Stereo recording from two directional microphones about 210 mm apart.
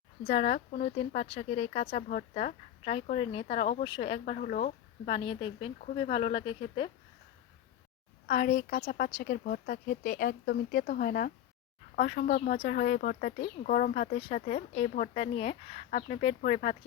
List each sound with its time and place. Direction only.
0.3 s speech: 30° left (ahead or behind)
4.4 s speech: 35° left (ahead or behind)
8.3 s a woman's voice: 40° left (ahead or behind)